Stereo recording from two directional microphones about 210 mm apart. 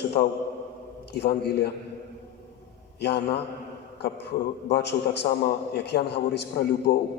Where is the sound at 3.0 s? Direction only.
50° left (ahead or behind).